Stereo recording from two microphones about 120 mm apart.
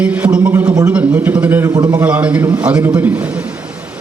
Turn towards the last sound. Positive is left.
turn(degrees=-15)  # may be behind; listen again after turning